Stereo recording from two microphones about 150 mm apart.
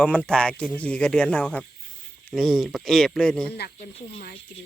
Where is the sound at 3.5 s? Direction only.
90° left.